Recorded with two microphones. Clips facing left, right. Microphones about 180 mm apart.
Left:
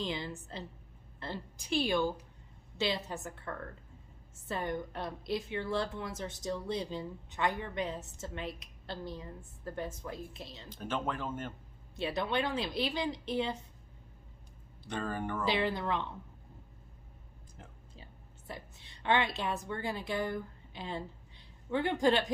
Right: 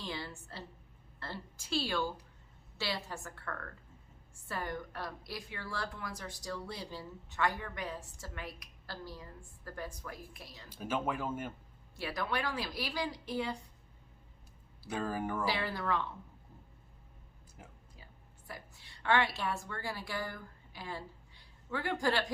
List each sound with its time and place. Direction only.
0.0 s a woman's voice: 20° left (ahead or behind)
10.7 s speech: 10° right (ahead or behind)
11.9 s a woman's voice: 25° left (ahead or behind)
14.8 s speech: 5° right (ahead or behind)
15.4 s a woman's voice: 20° left (ahead or behind)
17.6 s a sound: 5° right (ahead or behind)
17.9 s a sound: 25° left (ahead or behind)